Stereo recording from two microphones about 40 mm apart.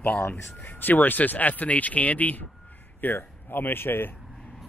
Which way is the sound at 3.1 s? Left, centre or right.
Left.